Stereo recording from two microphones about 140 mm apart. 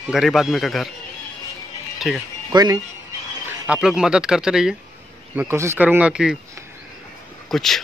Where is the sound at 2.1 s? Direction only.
Centre (ahead or behind).